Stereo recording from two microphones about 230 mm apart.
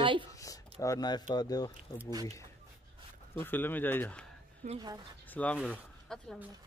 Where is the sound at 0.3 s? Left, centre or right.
Centre.